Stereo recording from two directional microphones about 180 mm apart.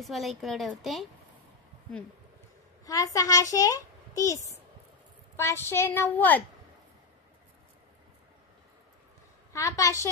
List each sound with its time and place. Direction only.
0.0 s a woman's voice: centre (ahead or behind)
2.8 s a child's voice: 20° left (ahead or behind)
9.5 s a woman's voice: 15° left (ahead or behind)